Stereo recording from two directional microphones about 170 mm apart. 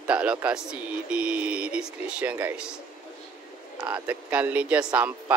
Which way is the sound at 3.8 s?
10° right (ahead or behind).